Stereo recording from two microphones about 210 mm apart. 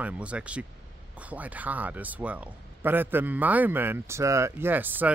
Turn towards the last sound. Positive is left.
turn(degrees=-10)  # may be behind; listen again after turning